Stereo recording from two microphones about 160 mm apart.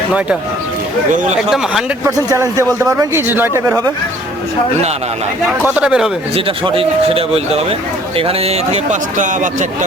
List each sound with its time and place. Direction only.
1.1 s speech: 50° right (ahead or behind)
1.4 s speech: 5° right (ahead or behind)
2.0 s a man's voice: 20° right (ahead or behind)
5.6 s speech: 5° right (ahead or behind)
6.3 s speech: 35° right (ahead or behind)